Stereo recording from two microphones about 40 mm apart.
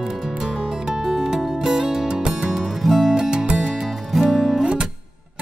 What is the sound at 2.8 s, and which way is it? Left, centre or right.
Music, centre.